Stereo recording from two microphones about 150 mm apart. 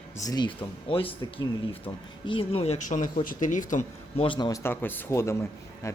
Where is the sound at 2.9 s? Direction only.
60° left (ahead or behind).